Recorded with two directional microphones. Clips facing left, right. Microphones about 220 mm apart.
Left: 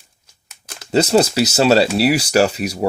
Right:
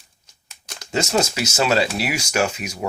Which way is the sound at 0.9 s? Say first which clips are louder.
Left 7 dB; 35° left (ahead or behind).